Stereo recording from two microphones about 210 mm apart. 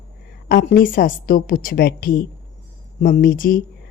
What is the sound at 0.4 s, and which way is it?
A woman's voice, 45° left (ahead or behind).